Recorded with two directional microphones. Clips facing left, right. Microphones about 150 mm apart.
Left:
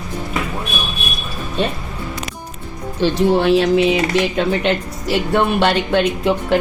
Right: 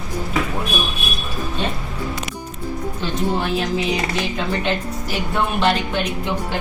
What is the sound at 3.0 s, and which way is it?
A woman's voice, 80° left.